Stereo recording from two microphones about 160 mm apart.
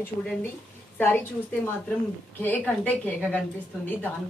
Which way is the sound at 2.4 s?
10° left (ahead or behind).